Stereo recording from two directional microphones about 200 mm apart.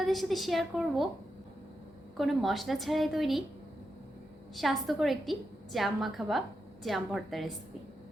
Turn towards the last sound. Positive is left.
turn(degrees=0)  # may be behind; listen again after turning